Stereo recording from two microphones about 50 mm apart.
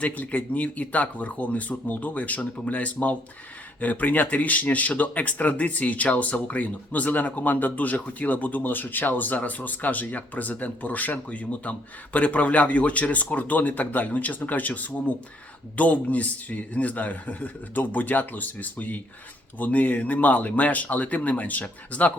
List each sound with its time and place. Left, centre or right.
0.0 s speech: left